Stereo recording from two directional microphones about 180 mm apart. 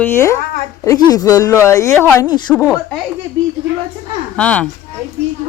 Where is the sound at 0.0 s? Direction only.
15° left (ahead or behind).